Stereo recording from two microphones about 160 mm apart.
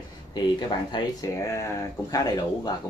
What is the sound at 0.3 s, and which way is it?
Speech, 25° left (ahead or behind).